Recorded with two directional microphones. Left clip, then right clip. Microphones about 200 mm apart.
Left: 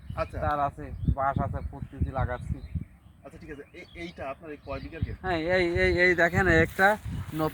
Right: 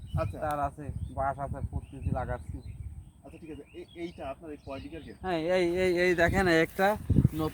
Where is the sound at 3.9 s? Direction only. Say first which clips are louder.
Left 2 dB; 10° left (ahead or behind).